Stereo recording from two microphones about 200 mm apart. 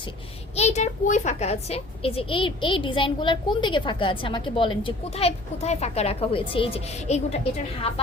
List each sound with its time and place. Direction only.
0.5 s a child's voice: 35° left (ahead or behind)